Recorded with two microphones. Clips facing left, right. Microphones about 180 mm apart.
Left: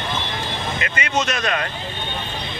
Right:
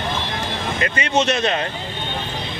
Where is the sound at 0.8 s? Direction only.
30° right (ahead or behind).